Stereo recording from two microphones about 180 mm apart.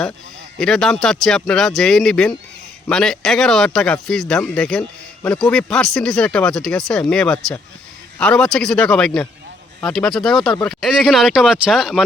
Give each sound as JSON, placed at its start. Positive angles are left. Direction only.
{"t": 0.6, "sound": "speech", "side_deg": 5}